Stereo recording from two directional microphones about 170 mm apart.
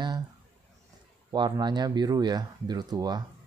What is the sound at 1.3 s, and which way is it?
Speech, 25° right (ahead or behind).